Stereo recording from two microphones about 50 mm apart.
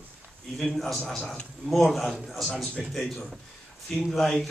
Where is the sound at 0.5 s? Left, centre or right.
Centre.